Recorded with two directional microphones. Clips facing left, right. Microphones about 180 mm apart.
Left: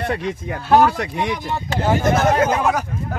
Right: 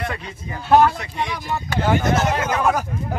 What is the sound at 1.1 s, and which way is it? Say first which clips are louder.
Speech: left 3 dB; 20° left (ahead or behind).